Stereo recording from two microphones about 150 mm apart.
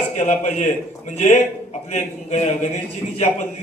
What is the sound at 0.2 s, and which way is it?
Speech, 50° left (ahead or behind).